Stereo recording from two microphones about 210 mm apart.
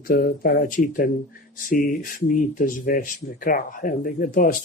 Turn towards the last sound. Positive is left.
turn(degrees=40)  # may be behind; listen again after turning